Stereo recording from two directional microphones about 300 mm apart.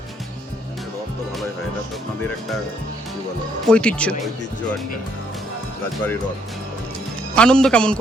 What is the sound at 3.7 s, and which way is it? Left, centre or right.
Speech, centre.